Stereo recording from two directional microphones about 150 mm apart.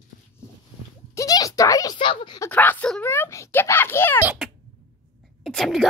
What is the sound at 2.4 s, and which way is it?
A child's voice, 10° left (ahead or behind).